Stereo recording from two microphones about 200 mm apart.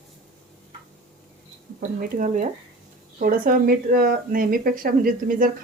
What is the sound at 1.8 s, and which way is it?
A woman's voice, 40° right (ahead or behind).